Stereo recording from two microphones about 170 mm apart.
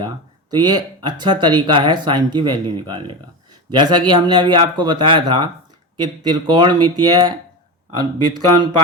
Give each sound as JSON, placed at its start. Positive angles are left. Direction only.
{"t": 0.5, "sound": "speech", "side_deg": -25}